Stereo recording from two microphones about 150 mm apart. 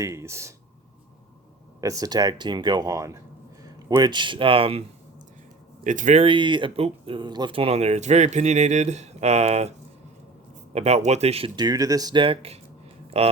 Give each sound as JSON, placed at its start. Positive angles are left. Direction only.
{"t": 0.0, "sound": "speech", "side_deg": -20}
{"t": 1.8, "sound": "speech", "side_deg": -20}
{"t": 5.8, "sound": "speech", "side_deg": -55}
{"t": 6.2, "sound": "speech", "side_deg": -35}